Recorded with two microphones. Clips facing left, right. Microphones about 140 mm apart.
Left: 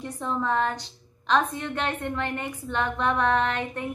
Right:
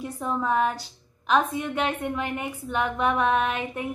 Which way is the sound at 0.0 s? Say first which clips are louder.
Right 1 dB; 10° right (ahead or behind).